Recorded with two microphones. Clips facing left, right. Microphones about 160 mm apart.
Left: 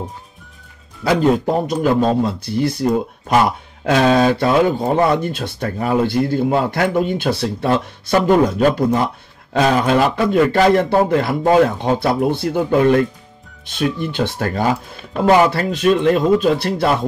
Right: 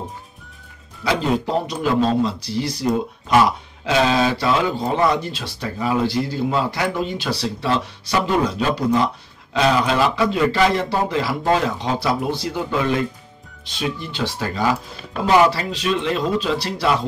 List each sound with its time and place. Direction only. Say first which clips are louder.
1.0 s speech: left 5 dB; 50° left (ahead or behind)